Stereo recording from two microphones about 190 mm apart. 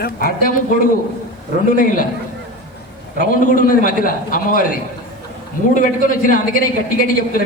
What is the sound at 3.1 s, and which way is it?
A man's voice, 45° left (ahead or behind).